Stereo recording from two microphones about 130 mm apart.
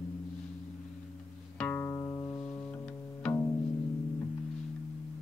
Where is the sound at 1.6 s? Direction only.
15° left (ahead or behind).